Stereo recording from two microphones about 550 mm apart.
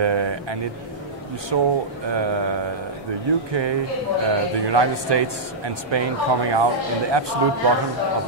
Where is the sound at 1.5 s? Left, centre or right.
Right.